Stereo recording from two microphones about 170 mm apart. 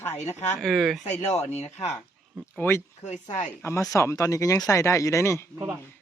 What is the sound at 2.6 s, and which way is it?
Speech, 15° left (ahead or behind).